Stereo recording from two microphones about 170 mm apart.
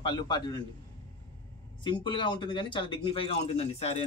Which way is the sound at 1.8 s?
25° left (ahead or behind).